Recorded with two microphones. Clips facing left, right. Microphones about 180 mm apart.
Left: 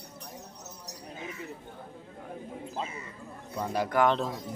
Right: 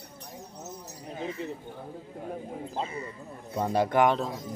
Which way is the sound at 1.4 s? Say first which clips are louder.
Right 5 dB; 25° right (ahead or behind).